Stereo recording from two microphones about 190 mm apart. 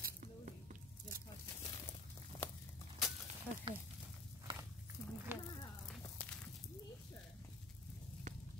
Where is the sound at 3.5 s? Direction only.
10° left (ahead or behind).